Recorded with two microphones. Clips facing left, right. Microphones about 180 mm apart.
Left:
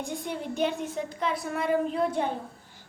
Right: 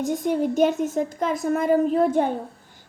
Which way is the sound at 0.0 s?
45° right (ahead or behind).